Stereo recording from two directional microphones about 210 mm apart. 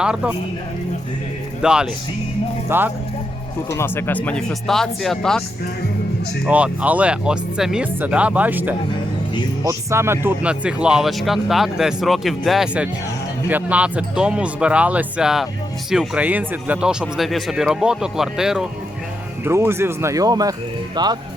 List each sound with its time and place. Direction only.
0.0 s speech: 5° right (ahead or behind)
1.6 s speech: 5° right (ahead or behind)
3.8 s speech: 10° left (ahead or behind)
6.4 s speech: 5° right (ahead or behind)